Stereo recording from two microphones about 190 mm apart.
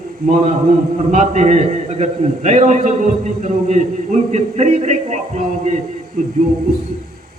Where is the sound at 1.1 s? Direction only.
40° right (ahead or behind).